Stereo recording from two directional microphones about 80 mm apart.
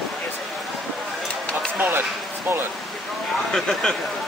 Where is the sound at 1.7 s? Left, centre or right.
Right.